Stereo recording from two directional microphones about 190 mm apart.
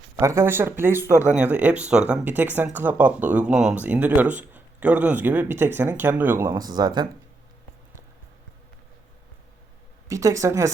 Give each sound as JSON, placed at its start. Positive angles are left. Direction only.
{"t": 0.2, "sound": "speech", "side_deg": -15}
{"t": 10.1, "sound": "speech", "side_deg": -15}